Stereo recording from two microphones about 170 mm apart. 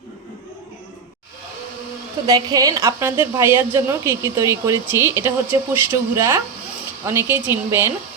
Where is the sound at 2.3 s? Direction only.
20° right (ahead or behind).